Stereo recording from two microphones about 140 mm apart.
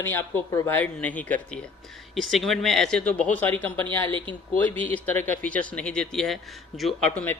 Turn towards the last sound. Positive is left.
turn(degrees=0)  # may be behind; listen again after turning